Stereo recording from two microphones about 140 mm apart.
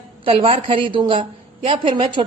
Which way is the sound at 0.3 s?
40° right (ahead or behind).